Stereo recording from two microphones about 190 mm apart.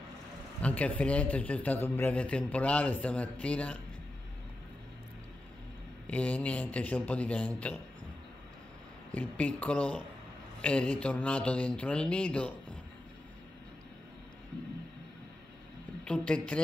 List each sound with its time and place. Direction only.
0.6 s a man's voice: 5° left (ahead or behind)
6.0 s a man's voice: 5° left (ahead or behind)
9.1 s a man's voice: 10° left (ahead or behind)
16.1 s a woman's voice: 5° left (ahead or behind)